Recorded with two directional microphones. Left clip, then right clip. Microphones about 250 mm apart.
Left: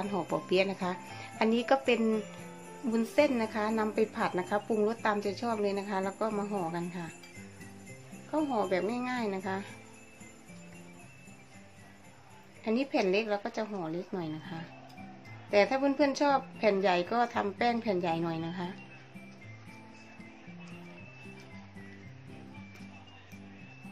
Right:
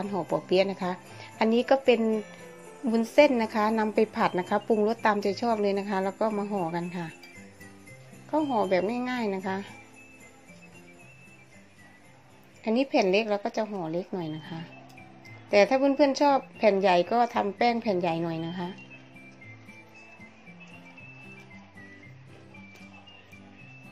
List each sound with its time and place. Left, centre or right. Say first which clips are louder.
0.1 s a woman's voice: right 5 dB; centre
8.3 s a woman's voice: right 5 dB; centre
12.6 s a woman's voice: right 5 dB; right